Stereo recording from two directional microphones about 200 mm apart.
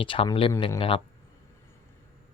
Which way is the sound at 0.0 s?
25° left (ahead or behind).